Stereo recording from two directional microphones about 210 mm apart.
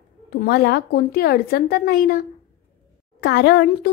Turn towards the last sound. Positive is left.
turn(degrees=50)  # may be behind; listen again after turning